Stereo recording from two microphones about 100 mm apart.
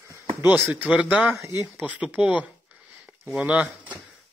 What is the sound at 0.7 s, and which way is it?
Speech, 10° right (ahead or behind).